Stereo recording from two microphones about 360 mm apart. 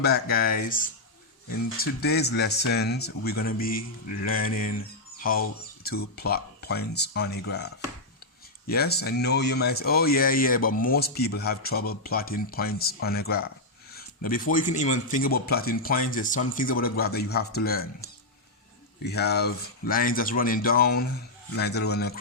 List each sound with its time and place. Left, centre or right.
0.0 s speech: left
19.0 s speech: left